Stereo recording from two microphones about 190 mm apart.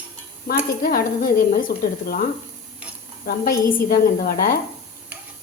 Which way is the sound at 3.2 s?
45° left (ahead or behind).